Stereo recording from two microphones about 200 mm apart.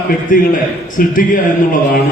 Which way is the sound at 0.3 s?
40° left (ahead or behind).